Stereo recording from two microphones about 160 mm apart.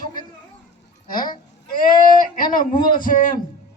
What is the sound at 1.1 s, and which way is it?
Speech, 60° left (ahead or behind).